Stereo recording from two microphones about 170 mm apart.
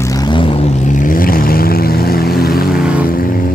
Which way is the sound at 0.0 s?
20° left (ahead or behind).